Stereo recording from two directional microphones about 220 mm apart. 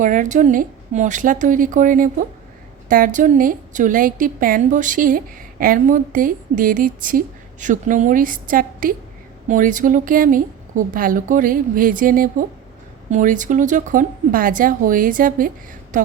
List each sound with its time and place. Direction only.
0.0 s a woman's voice: 35° right (ahead or behind)